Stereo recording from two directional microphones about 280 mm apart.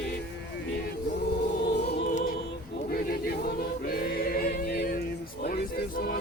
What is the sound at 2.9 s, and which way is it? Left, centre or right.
Choir, left.